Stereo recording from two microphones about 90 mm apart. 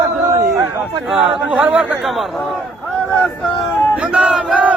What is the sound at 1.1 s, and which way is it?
Speech, 5° right (ahead or behind).